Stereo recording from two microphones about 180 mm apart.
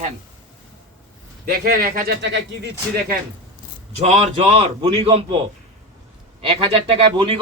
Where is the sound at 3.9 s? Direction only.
40° right (ahead or behind).